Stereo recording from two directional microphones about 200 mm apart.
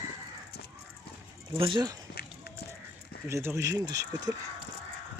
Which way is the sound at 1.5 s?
25° right (ahead or behind).